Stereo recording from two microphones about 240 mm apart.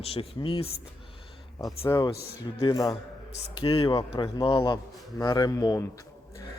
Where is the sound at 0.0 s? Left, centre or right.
Left.